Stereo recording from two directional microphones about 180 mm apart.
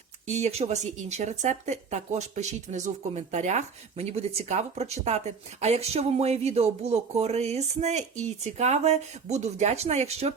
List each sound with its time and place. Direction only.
0.3 s speech: 40° right (ahead or behind)